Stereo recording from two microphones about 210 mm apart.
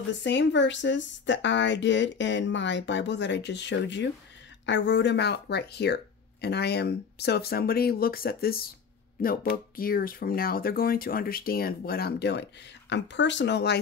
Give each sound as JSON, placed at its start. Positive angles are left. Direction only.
{"t": 0.2, "sound": "speech", "side_deg": 60}